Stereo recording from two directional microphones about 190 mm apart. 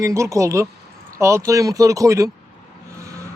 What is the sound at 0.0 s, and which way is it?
Speech, 15° right (ahead or behind).